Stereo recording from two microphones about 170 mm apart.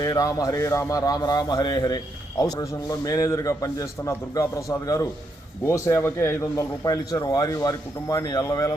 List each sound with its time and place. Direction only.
0.0 s a man's voice: 20° left (ahead or behind)
5.6 s a man's voice: 15° left (ahead or behind)